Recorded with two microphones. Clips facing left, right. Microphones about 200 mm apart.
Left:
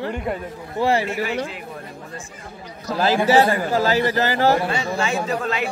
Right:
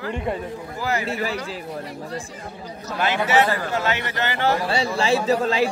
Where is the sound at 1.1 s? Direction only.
35° right (ahead or behind).